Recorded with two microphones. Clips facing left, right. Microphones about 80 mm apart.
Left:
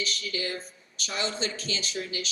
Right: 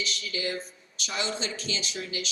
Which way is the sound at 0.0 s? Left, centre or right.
Left.